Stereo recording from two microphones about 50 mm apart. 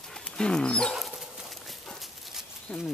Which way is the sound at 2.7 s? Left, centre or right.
Left.